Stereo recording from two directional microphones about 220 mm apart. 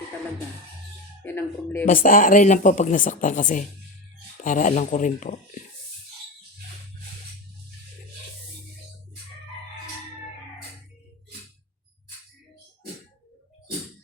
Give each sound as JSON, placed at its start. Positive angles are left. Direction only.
{"t": 1.2, "sound": "speech", "side_deg": 10}
{"t": 1.8, "sound": "speech", "side_deg": 40}